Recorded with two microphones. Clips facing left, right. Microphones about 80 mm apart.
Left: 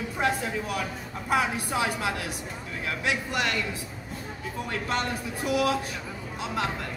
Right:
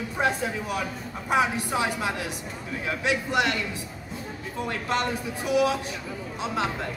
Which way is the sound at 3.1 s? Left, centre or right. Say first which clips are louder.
Right 4 dB; right.